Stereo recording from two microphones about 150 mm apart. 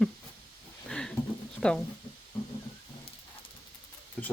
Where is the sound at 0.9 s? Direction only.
5° left (ahead or behind).